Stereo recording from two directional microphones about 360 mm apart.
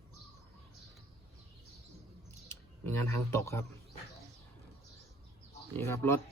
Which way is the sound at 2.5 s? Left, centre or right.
Centre.